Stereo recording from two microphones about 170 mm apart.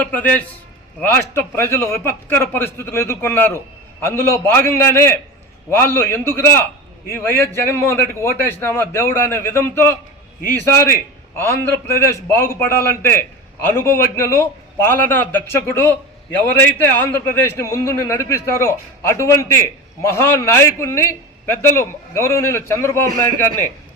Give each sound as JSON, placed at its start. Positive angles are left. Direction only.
{"t": 0.0, "sound": "a man's voice", "side_deg": 10}
{"t": 11.3, "sound": "a man's voice", "side_deg": 15}